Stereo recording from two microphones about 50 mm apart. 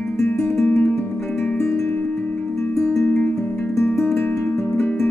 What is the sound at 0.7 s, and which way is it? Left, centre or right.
Music, left.